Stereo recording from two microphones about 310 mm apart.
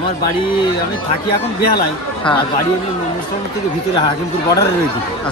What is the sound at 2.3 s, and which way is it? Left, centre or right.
Speech, centre.